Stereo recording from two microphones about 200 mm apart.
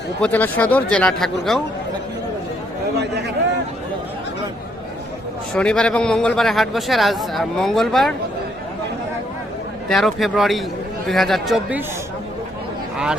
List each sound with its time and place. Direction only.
0.2 s speech: 10° left (ahead or behind)
3.0 s a sound: 55° right (ahead or behind)
5.5 s speech: 5° left (ahead or behind)
9.9 s speech: centre (ahead or behind)